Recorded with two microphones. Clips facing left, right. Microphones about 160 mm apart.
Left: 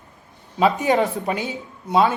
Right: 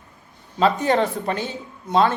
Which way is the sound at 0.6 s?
10° left (ahead or behind).